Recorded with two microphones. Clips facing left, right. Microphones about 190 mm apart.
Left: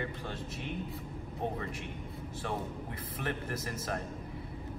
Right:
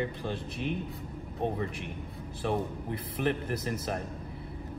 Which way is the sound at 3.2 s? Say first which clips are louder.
Right 6 dB; 25° right (ahead or behind).